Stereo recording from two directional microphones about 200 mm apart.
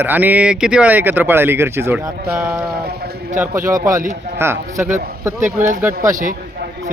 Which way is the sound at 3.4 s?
10° right (ahead or behind).